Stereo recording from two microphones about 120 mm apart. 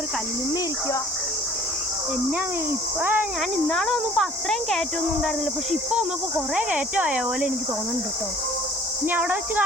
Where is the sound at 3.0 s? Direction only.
15° right (ahead or behind).